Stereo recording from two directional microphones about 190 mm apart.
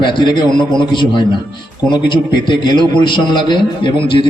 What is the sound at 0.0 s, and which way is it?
Speech, 25° left (ahead or behind).